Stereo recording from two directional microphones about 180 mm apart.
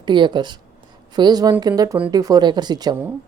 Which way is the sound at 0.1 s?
25° right (ahead or behind).